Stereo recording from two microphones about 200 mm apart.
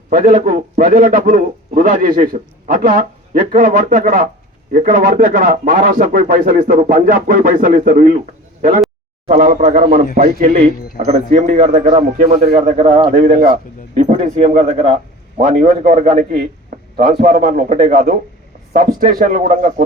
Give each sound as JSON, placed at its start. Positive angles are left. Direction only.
{"t": 0.1, "sound": "a man's voice", "side_deg": -40}
{"t": 9.2, "sound": "a man's voice", "side_deg": -40}